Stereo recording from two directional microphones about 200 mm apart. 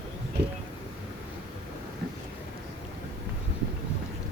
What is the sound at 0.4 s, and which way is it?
Speech, 55° right (ahead or behind).